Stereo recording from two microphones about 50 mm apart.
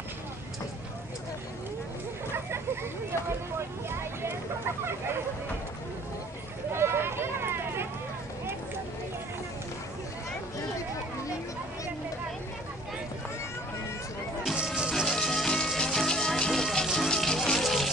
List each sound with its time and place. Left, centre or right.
3.1 s speech: right
6.7 s a sound: right
14.5 s music: centre
15.0 s music: centre
17.1 s music: centre